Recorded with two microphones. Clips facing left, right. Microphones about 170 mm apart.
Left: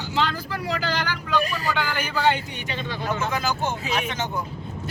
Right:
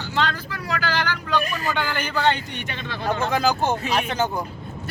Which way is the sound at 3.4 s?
35° right (ahead or behind).